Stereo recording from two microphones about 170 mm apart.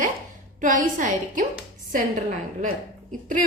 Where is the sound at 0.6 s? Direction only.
50° right (ahead or behind).